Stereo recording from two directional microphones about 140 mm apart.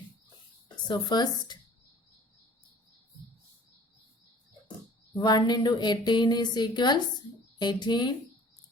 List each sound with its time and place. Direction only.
0.9 s a woman's voice: 30° left (ahead or behind)
5.2 s a woman's voice: 30° left (ahead or behind)